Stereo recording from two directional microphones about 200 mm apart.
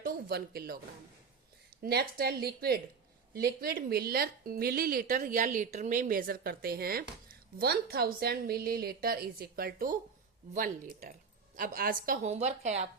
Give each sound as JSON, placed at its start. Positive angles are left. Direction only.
{"t": 0.0, "sound": "speech", "side_deg": -50}
{"t": 1.8, "sound": "speech", "side_deg": -50}